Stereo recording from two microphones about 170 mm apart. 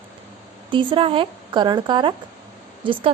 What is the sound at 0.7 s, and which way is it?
A woman's voice, 30° right (ahead or behind).